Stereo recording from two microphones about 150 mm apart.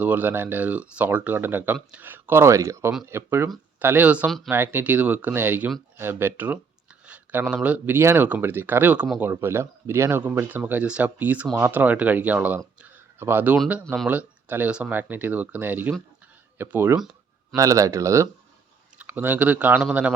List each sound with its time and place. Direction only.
0.0 s speech: 10° right (ahead or behind)
13.8 s speech: centre (ahead or behind)
14.1 s speech: 10° right (ahead or behind)